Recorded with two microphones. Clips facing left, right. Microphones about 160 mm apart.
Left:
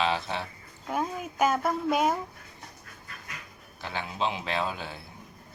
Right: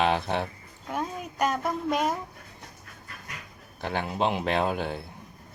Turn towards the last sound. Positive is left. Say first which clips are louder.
# right 5 dB
turn(degrees=-55)  # may be behind; listen again after turning